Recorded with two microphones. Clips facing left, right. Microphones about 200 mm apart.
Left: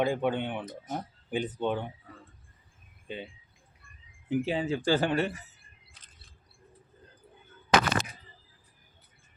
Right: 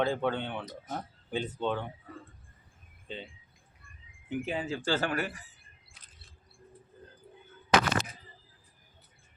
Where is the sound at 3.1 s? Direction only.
10° left (ahead or behind).